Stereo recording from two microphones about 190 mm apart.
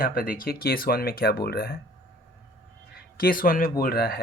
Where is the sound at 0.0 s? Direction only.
50° left (ahead or behind).